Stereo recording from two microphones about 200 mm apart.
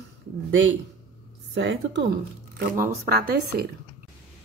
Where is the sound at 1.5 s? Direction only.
60° right (ahead or behind).